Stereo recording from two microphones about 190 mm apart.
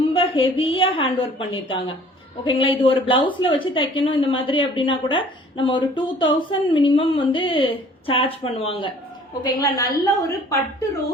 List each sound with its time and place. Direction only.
0.1 s a woman's voice: 25° left (ahead or behind)